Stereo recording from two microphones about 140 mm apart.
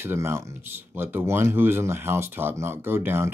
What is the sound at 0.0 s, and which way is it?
Speech, 20° right (ahead or behind).